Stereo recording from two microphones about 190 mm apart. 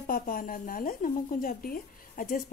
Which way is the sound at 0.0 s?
50° left (ahead or behind).